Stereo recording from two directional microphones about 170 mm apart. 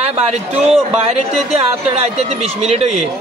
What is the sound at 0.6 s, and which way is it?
Speech, 40° right (ahead or behind).